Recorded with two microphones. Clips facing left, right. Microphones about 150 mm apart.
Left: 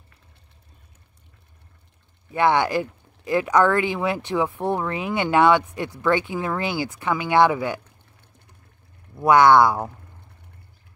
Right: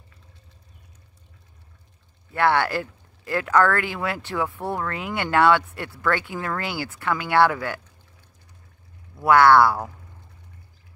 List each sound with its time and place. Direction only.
2.3 s speech: 15° left (ahead or behind)
9.1 s speech: 20° left (ahead or behind)